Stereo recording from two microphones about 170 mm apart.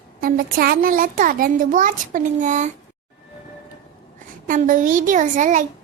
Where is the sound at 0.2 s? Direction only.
60° right (ahead or behind).